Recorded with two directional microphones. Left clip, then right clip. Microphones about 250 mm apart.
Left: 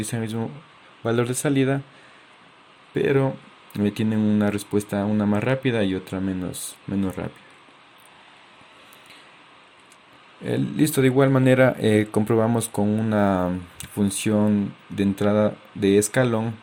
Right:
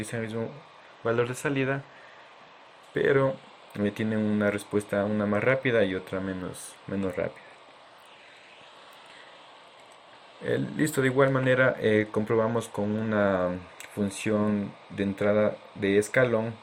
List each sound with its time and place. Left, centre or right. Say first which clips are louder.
0.0 s speech: left 3 dB; left
2.9 s speech: left 2 dB; left
10.4 s speech: left 4 dB; left